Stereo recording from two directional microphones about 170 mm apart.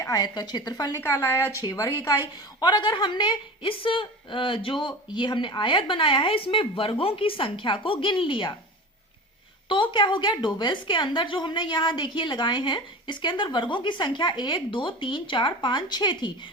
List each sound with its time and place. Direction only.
0.0 s a woman's voice: 20° left (ahead or behind)
9.6 s a woman's voice: 30° left (ahead or behind)